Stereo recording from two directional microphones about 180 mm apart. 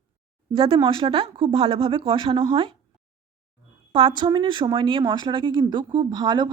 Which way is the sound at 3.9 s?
25° right (ahead or behind).